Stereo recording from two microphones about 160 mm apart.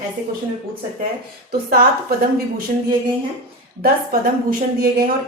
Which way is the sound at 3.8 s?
65° right (ahead or behind).